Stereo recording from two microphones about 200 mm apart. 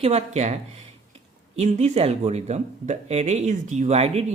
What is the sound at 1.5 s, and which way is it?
Speech, 35° right (ahead or behind).